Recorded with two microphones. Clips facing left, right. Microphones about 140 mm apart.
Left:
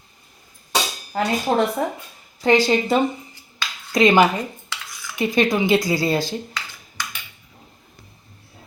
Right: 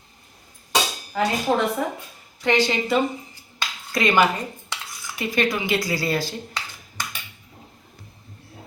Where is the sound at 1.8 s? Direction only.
35° left (ahead or behind).